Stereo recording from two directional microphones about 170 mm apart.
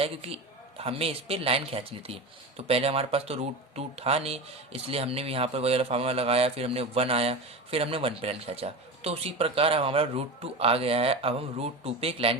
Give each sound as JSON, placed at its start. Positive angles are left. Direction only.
{"t": 0.0, "sound": "speech", "side_deg": -35}